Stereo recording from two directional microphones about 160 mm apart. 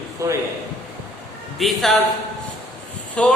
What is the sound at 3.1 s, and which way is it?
Speech, 10° left (ahead or behind).